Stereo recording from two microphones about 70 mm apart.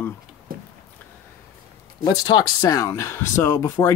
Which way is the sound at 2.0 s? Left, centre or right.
Left.